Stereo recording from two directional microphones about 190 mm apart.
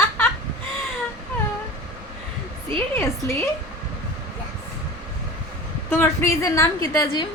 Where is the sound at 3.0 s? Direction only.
15° left (ahead or behind).